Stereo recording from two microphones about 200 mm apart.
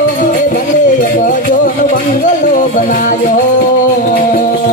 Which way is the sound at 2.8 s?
40° left (ahead or behind).